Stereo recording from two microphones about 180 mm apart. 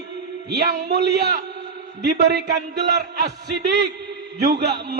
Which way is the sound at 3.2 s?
60° right (ahead or behind).